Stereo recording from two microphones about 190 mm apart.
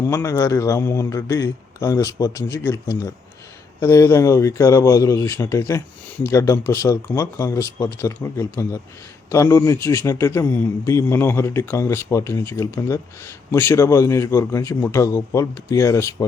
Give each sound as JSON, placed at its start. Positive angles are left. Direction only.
{"t": 0.1, "sound": "a man's voice", "side_deg": 15}